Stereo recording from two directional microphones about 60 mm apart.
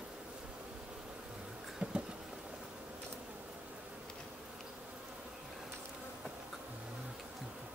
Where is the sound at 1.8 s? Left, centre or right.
Right.